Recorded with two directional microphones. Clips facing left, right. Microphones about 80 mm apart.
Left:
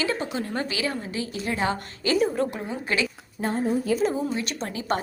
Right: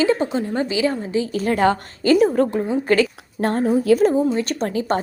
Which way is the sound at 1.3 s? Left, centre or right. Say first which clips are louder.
Right 8 dB; right.